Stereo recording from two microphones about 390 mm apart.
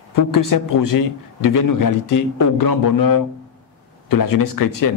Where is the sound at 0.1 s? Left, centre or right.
Left.